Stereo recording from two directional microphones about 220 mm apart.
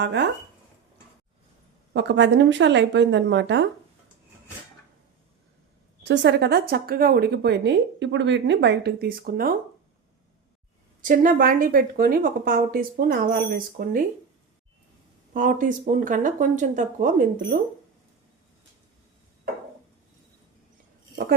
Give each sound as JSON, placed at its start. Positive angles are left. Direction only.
{"t": 0.0, "sound": "speech", "side_deg": -50}
{"t": 1.9, "sound": "speech", "side_deg": -50}
{"t": 6.0, "sound": "speech", "side_deg": -50}
{"t": 11.0, "sound": "speech", "side_deg": -40}
{"t": 15.3, "sound": "speech", "side_deg": -35}